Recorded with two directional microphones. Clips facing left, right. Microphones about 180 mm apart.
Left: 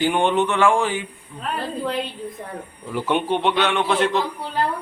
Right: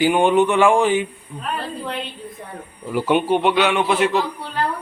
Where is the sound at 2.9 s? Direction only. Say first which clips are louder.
Right 4 dB; 10° right (ahead or behind).